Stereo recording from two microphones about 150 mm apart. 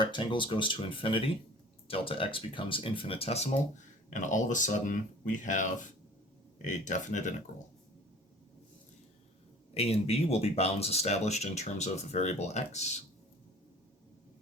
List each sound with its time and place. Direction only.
0.0 s speech: 30° left (ahead or behind)
4.1 s speech: 55° left (ahead or behind)
6.7 s speech: 55° left (ahead or behind)
9.7 s speech: 40° left (ahead or behind)